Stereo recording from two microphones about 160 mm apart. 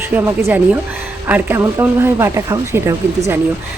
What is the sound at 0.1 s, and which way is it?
Speech, 15° right (ahead or behind).